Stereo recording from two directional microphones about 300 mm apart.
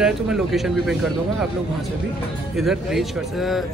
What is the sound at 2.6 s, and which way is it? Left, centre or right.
Speech, centre.